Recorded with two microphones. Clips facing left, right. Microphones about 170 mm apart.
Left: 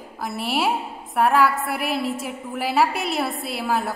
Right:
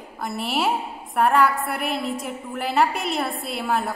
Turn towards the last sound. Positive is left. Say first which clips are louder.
# even
turn(degrees=0)  # may be behind; listen again after turning